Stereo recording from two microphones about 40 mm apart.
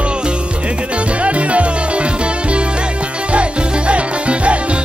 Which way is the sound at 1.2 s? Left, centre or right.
Right.